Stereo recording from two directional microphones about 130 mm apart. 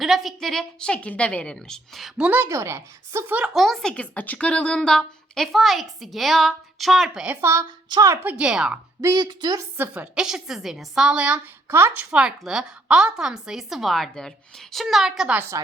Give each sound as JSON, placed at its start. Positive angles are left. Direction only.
{"t": 0.0, "sound": "a woman's voice", "side_deg": 0}
{"t": 7.9, "sound": "a woman's voice", "side_deg": -30}
{"t": 8.2, "sound": "speech", "side_deg": -10}
{"t": 9.0, "sound": "a woman's voice", "side_deg": -30}
{"t": 9.7, "sound": "a woman's voice", "side_deg": -15}
{"t": 11.7, "sound": "a woman's voice", "side_deg": -20}
{"t": 12.1, "sound": "a woman's voice", "side_deg": -5}
{"t": 15.4, "sound": "a woman's voice", "side_deg": -20}